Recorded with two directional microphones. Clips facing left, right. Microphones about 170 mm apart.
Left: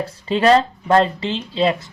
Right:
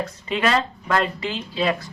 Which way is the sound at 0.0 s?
30° left (ahead or behind).